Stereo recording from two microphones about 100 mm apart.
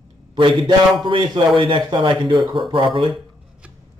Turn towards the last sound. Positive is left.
turn(degrees=-55)  # may be behind; listen again after turning